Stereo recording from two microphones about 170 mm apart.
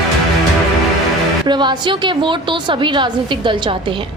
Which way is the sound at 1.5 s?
25° right (ahead or behind).